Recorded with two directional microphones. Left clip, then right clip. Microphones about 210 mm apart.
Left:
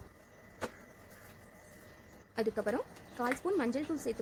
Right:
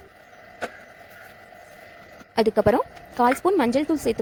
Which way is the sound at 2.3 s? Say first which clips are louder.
Right 15 dB; 35° right (ahead or behind).